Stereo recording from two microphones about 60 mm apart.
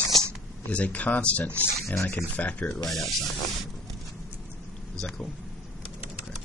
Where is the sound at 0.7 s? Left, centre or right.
Left.